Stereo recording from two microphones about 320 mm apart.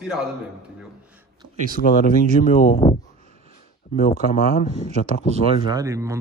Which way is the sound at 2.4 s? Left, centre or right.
Left.